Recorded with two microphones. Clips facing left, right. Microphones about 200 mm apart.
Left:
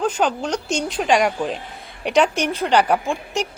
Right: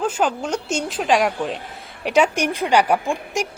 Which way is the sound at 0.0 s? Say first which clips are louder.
Left 1 dB; 5° right (ahead or behind).